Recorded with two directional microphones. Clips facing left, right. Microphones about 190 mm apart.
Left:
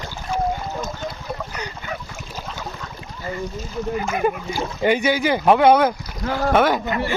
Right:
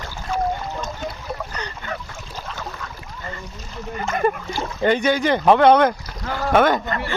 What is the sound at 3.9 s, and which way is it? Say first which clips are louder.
Speech: right 1 dB; 5° left (ahead or behind).